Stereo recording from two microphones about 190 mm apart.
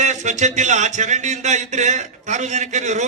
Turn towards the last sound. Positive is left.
turn(degrees=-40)  # may be behind; listen again after turning